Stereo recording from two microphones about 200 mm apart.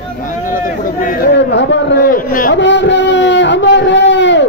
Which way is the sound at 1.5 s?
60° left (ahead or behind).